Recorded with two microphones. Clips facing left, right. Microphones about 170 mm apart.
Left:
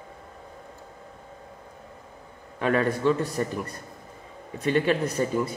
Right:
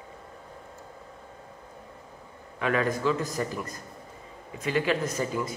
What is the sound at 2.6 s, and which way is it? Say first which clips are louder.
Speech: left 3 dB; 35° left (ahead or behind).